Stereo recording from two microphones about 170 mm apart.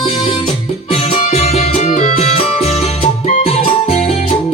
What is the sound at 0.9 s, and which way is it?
Music, 35° left (ahead or behind).